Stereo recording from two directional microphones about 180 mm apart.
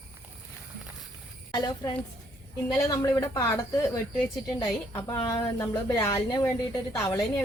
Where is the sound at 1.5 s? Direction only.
20° left (ahead or behind).